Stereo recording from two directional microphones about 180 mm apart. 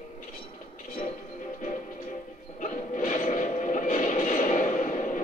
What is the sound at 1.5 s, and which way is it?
Music, 45° left (ahead or behind).